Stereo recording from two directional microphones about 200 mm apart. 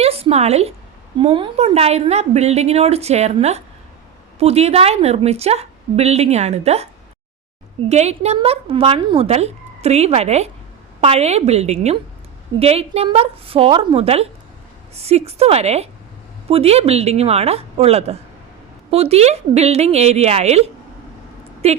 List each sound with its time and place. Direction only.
0.0 s a sound: 30° right (ahead or behind)
1.2 s a woman's voice: 30° right (ahead or behind)
7.9 s a woman's voice: 35° right (ahead or behind)